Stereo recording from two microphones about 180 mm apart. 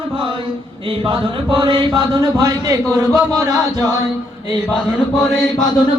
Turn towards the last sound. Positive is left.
turn(degrees=20)  # may be behind; listen again after turning